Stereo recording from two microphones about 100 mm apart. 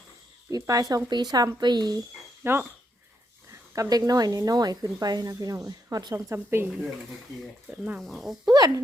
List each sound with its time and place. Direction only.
0.5 s speech: 35° right (ahead or behind)
2.4 s speech: 25° right (ahead or behind)
3.5 s speech: 35° right (ahead or behind)
6.1 s a woman's voice: 30° right (ahead or behind)
7.7 s speech: 15° right (ahead or behind)
8.0 s speech: centre (ahead or behind)
8.4 s speech: 40° right (ahead or behind)